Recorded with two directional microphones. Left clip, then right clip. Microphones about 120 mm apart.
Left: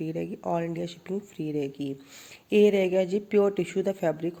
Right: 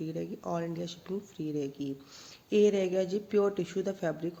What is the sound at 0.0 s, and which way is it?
Speech, 20° left (ahead or behind).